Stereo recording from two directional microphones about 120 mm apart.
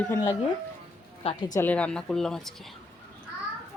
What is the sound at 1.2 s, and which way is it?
Speech, 60° left (ahead or behind).